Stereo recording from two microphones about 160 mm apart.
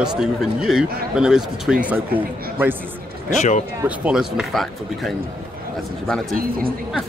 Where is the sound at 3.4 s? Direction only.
50° left (ahead or behind).